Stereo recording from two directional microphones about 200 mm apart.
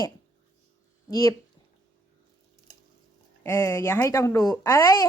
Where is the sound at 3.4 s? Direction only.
15° left (ahead or behind).